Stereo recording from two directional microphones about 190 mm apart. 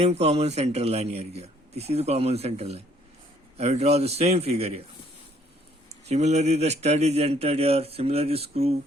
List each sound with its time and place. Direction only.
0.0 s speech: 35° right (ahead or behind)
6.1 s speech: 35° right (ahead or behind)